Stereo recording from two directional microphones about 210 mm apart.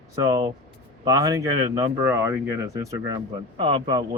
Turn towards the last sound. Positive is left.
turn(degrees=-25)  # may be behind; listen again after turning